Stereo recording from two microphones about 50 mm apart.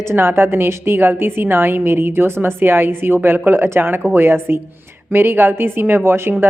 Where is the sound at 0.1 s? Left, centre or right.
Right.